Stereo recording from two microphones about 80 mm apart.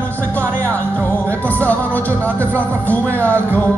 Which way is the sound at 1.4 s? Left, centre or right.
Centre.